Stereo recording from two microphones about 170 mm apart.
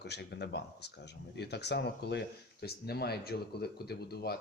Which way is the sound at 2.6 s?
70° left (ahead or behind).